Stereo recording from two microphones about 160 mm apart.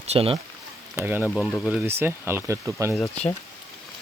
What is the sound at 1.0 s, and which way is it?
Speech, 15° right (ahead or behind).